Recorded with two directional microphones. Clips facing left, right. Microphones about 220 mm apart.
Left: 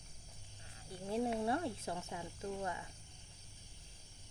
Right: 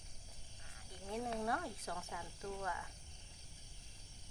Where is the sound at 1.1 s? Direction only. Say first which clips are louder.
Left 5 dB; 25° left (ahead or behind).